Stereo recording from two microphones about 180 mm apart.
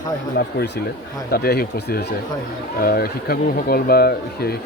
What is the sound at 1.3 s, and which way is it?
Speech, 60° left (ahead or behind).